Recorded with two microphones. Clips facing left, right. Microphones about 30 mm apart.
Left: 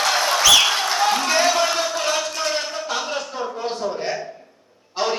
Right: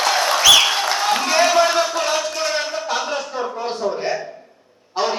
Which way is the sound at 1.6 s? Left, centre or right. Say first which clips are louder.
Right 5 dB; right.